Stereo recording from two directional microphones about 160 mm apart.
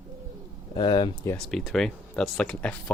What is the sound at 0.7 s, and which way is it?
Speech, 30° left (ahead or behind).